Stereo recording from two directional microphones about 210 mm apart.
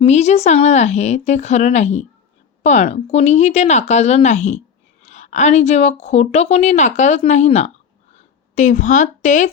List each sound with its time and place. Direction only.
0.0 s a woman's voice: 30° left (ahead or behind)